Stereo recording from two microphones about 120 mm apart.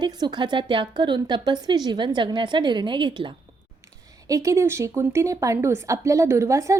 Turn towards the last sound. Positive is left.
turn(degrees=-25)  # may be behind; listen again after turning